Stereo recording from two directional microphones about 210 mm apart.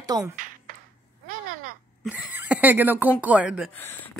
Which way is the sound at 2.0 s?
5° right (ahead or behind).